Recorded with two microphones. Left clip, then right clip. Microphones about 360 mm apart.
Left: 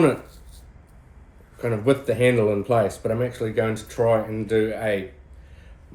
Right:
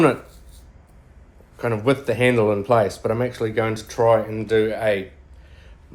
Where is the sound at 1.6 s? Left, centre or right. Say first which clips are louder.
Right 1 dB; centre.